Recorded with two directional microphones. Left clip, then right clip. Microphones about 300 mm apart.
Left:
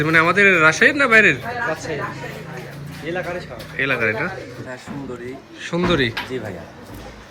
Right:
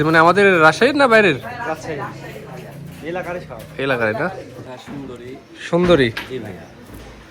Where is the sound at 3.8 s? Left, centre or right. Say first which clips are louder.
Right 1 dB; centre.